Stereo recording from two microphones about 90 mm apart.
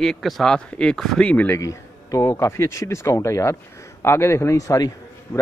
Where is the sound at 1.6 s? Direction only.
40° left (ahead or behind).